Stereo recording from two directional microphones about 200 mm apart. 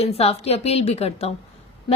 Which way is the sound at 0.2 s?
30° left (ahead or behind).